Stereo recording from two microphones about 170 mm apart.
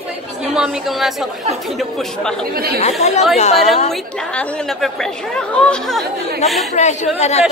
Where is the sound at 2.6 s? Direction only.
65° right (ahead or behind).